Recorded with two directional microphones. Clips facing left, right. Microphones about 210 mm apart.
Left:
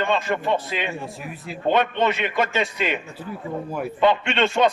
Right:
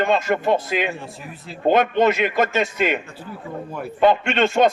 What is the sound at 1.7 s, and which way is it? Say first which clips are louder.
Speech: right 4 dB; 45° right (ahead or behind).